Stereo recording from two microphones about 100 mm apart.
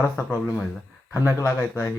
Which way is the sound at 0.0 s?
25° left (ahead or behind).